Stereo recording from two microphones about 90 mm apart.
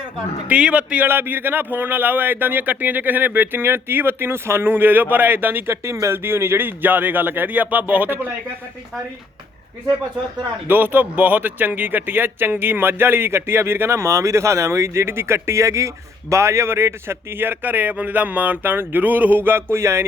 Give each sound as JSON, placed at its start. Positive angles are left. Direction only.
{"t": 0.4, "sound": "speech", "side_deg": -15}
{"t": 5.7, "sound": "speech", "side_deg": -35}
{"t": 10.7, "sound": "speech", "side_deg": -20}